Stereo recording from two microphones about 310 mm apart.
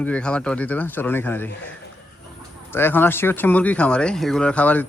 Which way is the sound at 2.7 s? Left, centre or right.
Centre.